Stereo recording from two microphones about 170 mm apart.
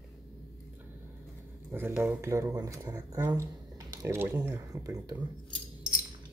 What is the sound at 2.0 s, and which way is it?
Speech, 15° right (ahead or behind).